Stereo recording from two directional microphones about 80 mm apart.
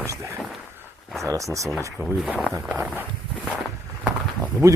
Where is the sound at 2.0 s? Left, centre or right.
Centre.